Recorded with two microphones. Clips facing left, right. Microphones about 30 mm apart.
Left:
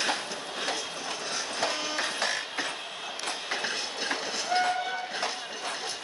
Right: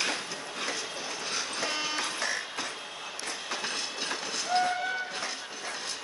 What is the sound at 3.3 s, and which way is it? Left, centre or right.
Train, left.